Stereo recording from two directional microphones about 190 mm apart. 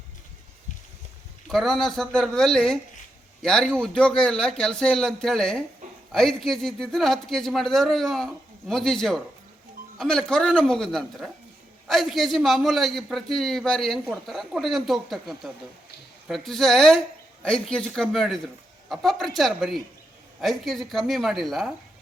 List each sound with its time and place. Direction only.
1.5 s a man's voice: centre (ahead or behind)